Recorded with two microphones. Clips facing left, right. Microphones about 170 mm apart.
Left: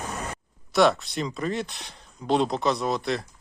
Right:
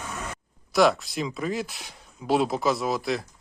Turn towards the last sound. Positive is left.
turn(degrees=0)  # may be behind; listen again after turning